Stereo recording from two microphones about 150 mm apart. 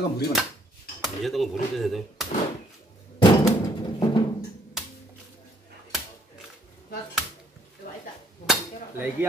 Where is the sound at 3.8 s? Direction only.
30° left (ahead or behind).